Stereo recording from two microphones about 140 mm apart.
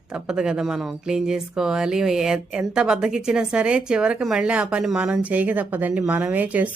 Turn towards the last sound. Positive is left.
turn(degrees=-10)  # may be behind; listen again after turning